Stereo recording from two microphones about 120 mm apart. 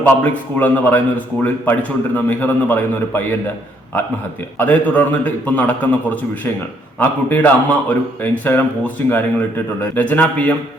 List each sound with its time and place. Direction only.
0.0 s a man's voice: 15° left (ahead or behind)
4.5 s a man's voice: 15° left (ahead or behind)